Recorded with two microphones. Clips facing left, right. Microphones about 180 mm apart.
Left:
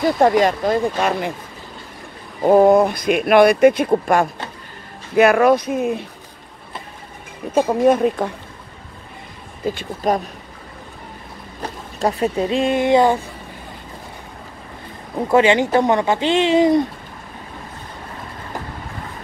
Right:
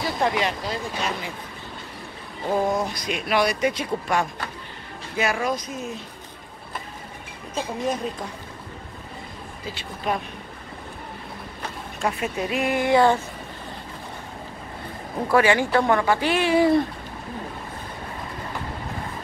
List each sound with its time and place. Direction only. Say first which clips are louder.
0.0 s speech: left 9 dB; 45° left (ahead or behind)
2.4 s speech: left 12 dB; 60° left (ahead or behind)
7.5 s speech: left 12 dB; 55° left (ahead or behind)
9.7 s speech: left 8 dB; 45° left (ahead or behind)
11.6 s speech: left 6 dB; 35° left (ahead or behind); by 13.2 s 20° left (ahead or behind)
15.3 s speech: left 5 dB; 20° left (ahead or behind)